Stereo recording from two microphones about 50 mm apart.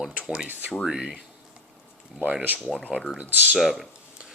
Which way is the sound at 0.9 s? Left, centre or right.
Centre.